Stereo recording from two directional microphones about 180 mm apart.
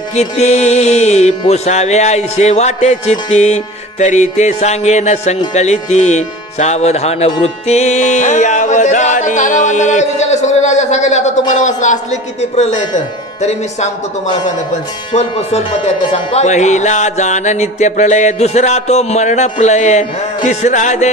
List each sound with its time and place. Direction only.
0.1 s speech: 40° left (ahead or behind)